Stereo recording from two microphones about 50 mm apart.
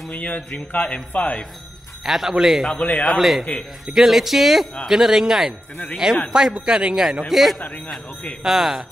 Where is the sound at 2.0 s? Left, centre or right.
Centre.